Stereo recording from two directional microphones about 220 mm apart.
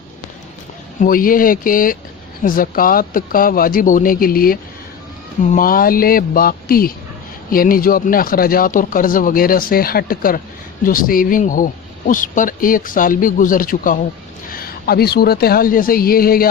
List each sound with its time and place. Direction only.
1.0 s a woman's voice: 40° left (ahead or behind)